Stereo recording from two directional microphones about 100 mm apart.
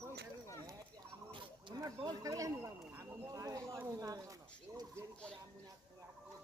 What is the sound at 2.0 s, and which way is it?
Speech, 40° right (ahead or behind).